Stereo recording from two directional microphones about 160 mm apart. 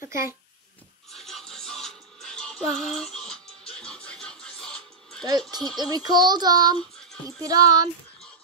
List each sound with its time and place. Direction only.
0.1 s a child's voice: 15° right (ahead or behind)
1.1 s music: centre (ahead or behind)
5.8 s child singing: 25° right (ahead or behind)